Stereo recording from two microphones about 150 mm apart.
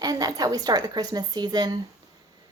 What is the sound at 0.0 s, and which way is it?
Speech, 25° right (ahead or behind).